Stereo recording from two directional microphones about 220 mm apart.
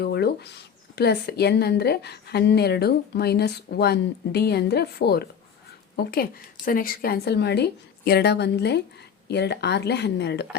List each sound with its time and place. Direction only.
0.0 s speech: 45° left (ahead or behind)